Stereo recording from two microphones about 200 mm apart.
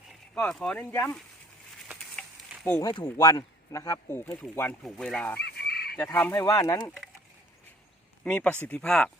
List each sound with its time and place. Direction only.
0.3 s speech: 5° left (ahead or behind)
2.2 s a sound: 5° left (ahead or behind)
2.8 s speech: 20° left (ahead or behind)
5.4 s fowl: 55° left (ahead or behind)
6.0 s speech: 10° left (ahead or behind)
8.2 s speech: 5° left (ahead or behind)